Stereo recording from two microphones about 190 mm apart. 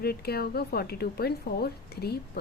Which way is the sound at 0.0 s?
55° left (ahead or behind).